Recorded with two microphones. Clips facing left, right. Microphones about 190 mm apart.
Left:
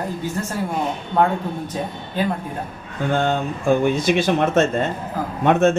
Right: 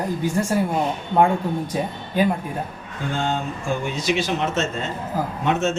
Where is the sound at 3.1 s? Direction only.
55° left (ahead or behind).